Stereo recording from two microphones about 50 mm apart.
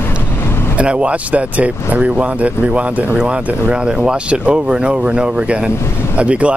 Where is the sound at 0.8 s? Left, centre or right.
Right.